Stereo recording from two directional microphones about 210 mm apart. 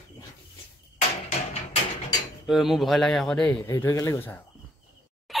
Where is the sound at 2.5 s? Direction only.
Centre (ahead or behind).